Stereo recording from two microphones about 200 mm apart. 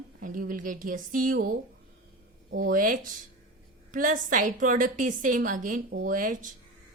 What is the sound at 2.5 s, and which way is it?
A woman's voice, 45° right (ahead or behind).